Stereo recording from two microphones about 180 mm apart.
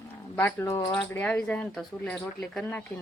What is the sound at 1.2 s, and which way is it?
Speech, 10° left (ahead or behind).